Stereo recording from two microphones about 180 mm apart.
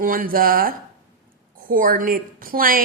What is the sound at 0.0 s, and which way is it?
A woman's voice, 50° right (ahead or behind).